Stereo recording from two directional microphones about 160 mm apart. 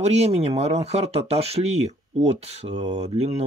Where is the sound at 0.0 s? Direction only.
40° right (ahead or behind).